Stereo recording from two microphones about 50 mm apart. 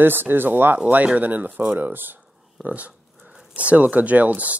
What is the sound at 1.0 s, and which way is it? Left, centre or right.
Speech, right.